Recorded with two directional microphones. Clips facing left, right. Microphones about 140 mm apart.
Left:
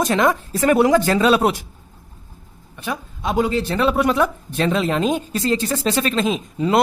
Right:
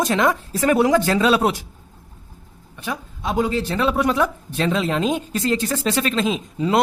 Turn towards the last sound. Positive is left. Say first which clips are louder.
# left 1 dB
turn(degrees=50)  # may be behind; listen again after turning